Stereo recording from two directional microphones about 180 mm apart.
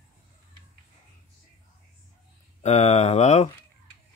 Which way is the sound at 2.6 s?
40° left (ahead or behind).